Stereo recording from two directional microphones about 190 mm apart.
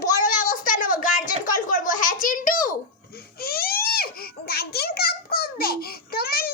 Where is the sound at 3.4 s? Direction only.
55° left (ahead or behind).